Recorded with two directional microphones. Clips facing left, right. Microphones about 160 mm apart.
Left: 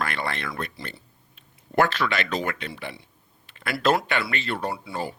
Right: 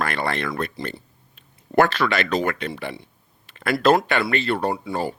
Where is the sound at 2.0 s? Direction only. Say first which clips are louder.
Right 4 dB; 60° right (ahead or behind).